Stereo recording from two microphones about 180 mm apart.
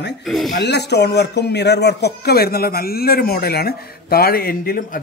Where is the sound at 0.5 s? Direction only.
70° left (ahead or behind).